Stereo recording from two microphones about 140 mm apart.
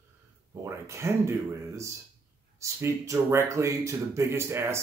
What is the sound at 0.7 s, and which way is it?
Speech, 20° right (ahead or behind).